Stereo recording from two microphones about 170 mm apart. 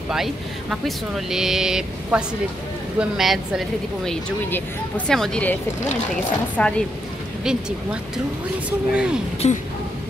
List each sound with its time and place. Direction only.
0.1 s speech: centre (ahead or behind)
8.6 s speech: 5° right (ahead or behind)
9.4 s speech: 40° left (ahead or behind)